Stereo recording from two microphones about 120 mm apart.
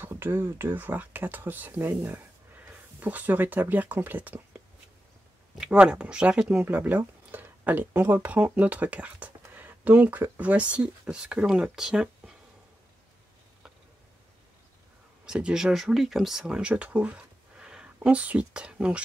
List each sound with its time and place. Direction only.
0.0 s speech: 20° right (ahead or behind)
5.6 s speech: 10° right (ahead or behind)
15.2 s speech: 5° right (ahead or behind)